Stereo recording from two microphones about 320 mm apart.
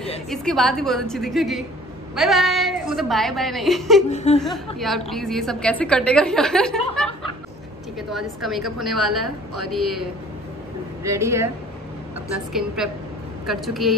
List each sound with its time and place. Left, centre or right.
0.0 s a woman's voice: centre
4.1 s speech: left
4.7 s a woman's voice: centre
8.1 s a woman's voice: centre
11.1 s speech: centre
12.5 s a woman's voice: centre